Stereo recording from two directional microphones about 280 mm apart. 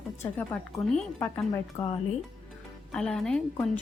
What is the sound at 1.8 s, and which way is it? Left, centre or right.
Speech, left.